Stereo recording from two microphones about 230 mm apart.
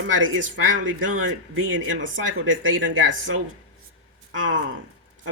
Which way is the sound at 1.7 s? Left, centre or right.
Right.